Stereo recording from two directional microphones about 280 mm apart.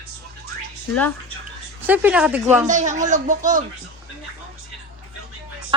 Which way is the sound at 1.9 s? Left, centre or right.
Centre.